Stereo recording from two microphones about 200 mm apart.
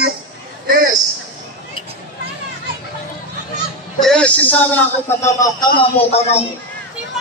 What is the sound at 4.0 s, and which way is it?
A man's voice, 5° left (ahead or behind).